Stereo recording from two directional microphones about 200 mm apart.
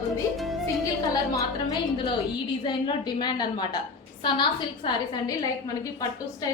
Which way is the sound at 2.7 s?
20° left (ahead or behind).